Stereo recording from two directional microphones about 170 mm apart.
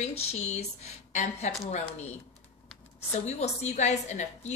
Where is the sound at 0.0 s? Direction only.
40° left (ahead or behind).